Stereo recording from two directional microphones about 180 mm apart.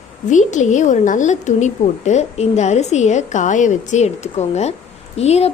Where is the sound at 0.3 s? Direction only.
40° left (ahead or behind).